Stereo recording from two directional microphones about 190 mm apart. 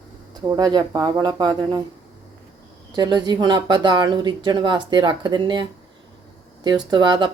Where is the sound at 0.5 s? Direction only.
25° right (ahead or behind).